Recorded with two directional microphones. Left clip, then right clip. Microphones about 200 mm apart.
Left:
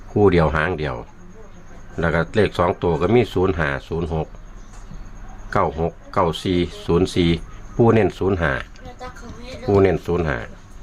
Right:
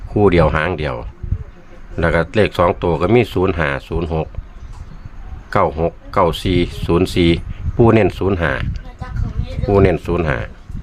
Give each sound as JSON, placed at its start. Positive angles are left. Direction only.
{"t": 0.1, "sound": "speech", "side_deg": -15}
{"t": 5.5, "sound": "speech", "side_deg": -20}